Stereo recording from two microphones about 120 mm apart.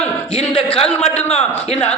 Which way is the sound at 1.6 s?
60° left (ahead or behind).